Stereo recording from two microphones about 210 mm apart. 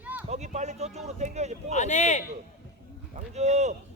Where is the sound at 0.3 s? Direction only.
35° right (ahead or behind).